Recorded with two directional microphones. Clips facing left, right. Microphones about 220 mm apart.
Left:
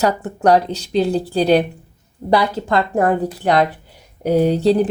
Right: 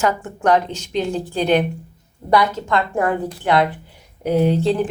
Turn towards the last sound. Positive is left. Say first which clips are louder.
# left 3 dB
turn(degrees=40)  # may be behind; listen again after turning